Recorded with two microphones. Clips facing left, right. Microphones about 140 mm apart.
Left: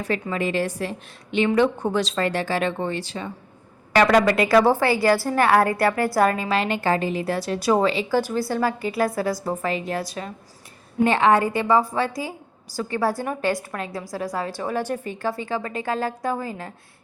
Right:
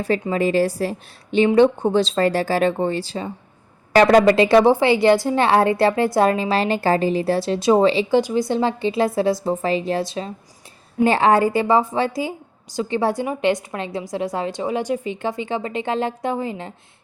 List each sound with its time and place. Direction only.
0.0 s a woman's voice: 30° right (ahead or behind)
8.2 s a woman's voice: 15° right (ahead or behind)